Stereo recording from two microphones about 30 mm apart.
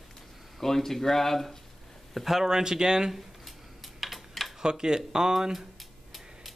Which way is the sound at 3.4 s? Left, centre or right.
Centre.